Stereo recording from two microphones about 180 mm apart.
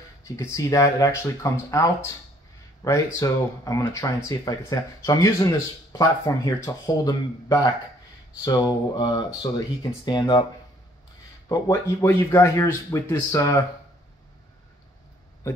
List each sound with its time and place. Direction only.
0.4 s speech: 15° left (ahead or behind)
11.4 s speech: 20° left (ahead or behind)